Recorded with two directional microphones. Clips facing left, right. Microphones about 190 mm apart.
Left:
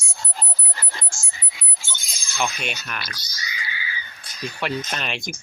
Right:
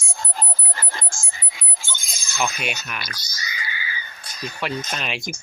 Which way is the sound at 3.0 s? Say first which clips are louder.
Right 1 dB; 45° right (ahead or behind).